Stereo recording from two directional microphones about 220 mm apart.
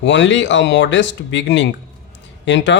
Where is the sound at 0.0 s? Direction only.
55° left (ahead or behind).